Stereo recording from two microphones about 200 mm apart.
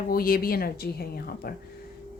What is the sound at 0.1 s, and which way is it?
A woman's voice, 45° left (ahead or behind).